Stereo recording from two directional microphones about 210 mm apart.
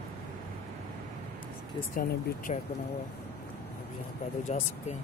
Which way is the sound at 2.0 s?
40° left (ahead or behind).